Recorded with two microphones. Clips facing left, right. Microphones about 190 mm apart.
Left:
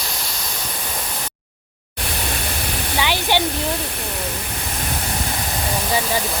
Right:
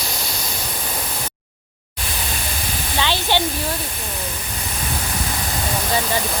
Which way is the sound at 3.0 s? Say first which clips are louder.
Even; 15° left (ahead or behind).